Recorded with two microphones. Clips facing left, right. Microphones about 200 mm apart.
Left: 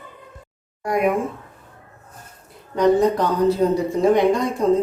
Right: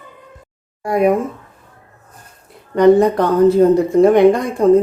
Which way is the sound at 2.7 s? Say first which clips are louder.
Right 6 dB; 60° right (ahead or behind).